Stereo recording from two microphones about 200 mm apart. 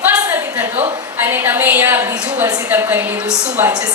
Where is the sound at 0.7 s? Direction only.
35° right (ahead or behind).